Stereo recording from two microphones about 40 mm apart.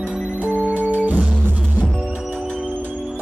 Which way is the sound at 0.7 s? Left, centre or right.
Right.